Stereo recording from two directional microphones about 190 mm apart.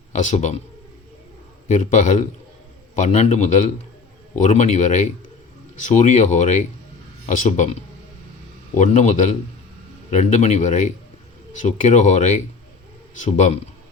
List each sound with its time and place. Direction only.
0.1 s speech: 40° left (ahead or behind)
1.6 s speech: 40° left (ahead or behind)